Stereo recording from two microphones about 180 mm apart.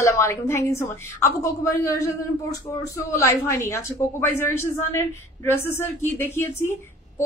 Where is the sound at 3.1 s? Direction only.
15° left (ahead or behind).